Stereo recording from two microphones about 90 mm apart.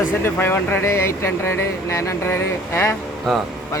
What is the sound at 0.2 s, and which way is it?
Speech, 25° left (ahead or behind).